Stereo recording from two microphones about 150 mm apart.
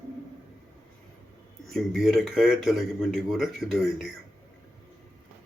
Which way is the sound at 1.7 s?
Centre (ahead or behind).